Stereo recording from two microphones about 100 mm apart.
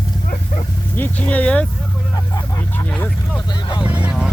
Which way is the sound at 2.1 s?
35° left (ahead or behind).